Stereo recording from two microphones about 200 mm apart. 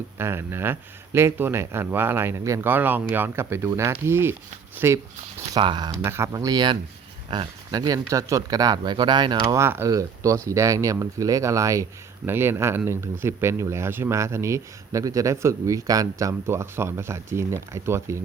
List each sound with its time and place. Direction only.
0.2 s speech: 10° right (ahead or behind)